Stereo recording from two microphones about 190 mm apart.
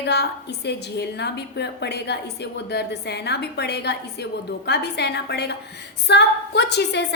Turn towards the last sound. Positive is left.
turn(degrees=65)  # may be behind; listen again after turning